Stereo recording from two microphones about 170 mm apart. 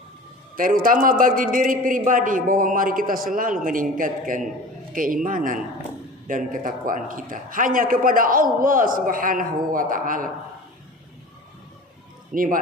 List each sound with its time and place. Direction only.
0.5 s a man's voice: 55° right (ahead or behind)
12.3 s a man's voice: 55° right (ahead or behind)